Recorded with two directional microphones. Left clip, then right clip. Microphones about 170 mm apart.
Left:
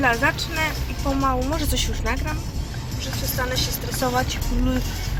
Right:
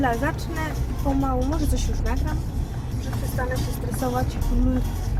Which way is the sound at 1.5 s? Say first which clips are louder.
Left 2 dB; 15° left (ahead or behind).